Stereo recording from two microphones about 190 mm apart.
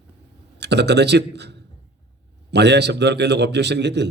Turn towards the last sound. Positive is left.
turn(degrees=-65)  # may be behind; listen again after turning